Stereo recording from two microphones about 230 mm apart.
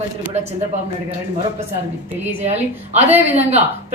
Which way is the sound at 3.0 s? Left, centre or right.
Centre.